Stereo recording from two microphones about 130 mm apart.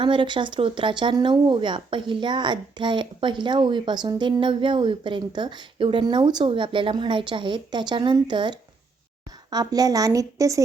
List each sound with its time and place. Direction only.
0.0 s a woman's voice: 40° right (ahead or behind)